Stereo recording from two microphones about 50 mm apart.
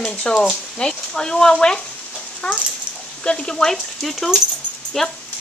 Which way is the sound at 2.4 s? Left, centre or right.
Left.